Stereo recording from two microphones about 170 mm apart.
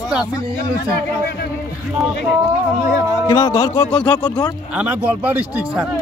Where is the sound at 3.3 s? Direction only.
20° left (ahead or behind).